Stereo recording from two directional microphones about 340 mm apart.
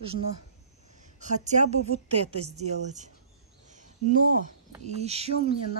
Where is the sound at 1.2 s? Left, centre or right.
Right.